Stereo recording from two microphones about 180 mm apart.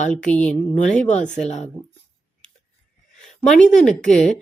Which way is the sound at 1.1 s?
40° left (ahead or behind).